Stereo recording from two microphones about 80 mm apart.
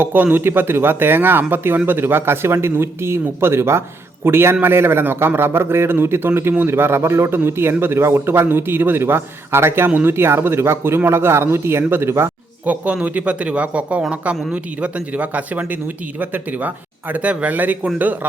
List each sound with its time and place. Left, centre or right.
0.0 s a man's voice: right
12.6 s a man's voice: centre